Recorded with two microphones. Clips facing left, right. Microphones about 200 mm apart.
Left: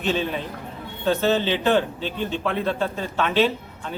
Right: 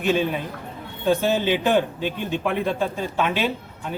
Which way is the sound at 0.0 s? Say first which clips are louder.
Right 3 dB; 10° right (ahead or behind).